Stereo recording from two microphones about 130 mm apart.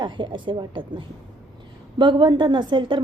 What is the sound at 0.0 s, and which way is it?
A woman's voice, 40° right (ahead or behind).